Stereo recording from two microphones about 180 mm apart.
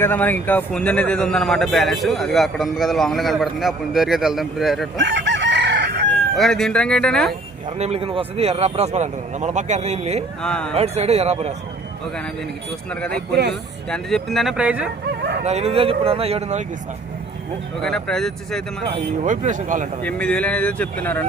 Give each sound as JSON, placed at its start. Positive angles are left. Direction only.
{"t": 0.0, "sound": "speech", "side_deg": 10}
{"t": 4.9, "sound": "chicken", "side_deg": -80}
{"t": 6.3, "sound": "speech", "side_deg": 0}
{"t": 7.8, "sound": "a man's voice", "side_deg": -35}
{"t": 10.4, "sound": "speech", "side_deg": 5}
{"t": 10.8, "sound": "a man's voice", "side_deg": -35}
{"t": 12.9, "sound": "speech", "side_deg": 5}
{"t": 15.4, "sound": "a man's voice", "side_deg": -35}
{"t": 17.8, "sound": "speech", "side_deg": 5}
{"t": 19.2, "sound": "speech", "side_deg": -45}
{"t": 20.0, "sound": "speech", "side_deg": 5}